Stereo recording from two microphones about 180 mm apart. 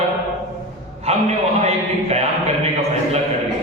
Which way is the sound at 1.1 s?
35° right (ahead or behind).